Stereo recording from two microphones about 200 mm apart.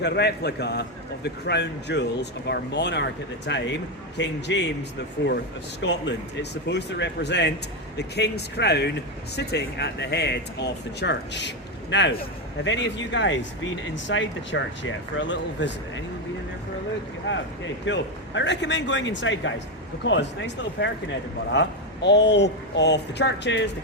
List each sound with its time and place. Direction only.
0.0 s speech: 55° left (ahead or behind)
17.3 s speech: 65° left (ahead or behind)